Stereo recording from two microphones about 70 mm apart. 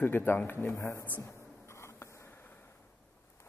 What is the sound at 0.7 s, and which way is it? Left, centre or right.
Speech, left.